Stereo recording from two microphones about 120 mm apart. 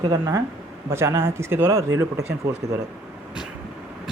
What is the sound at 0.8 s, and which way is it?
Speech, 20° right (ahead or behind).